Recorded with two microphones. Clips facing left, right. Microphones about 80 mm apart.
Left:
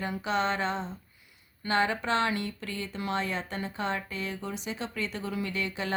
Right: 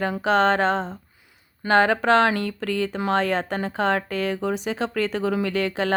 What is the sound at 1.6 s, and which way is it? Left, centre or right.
Speech, right.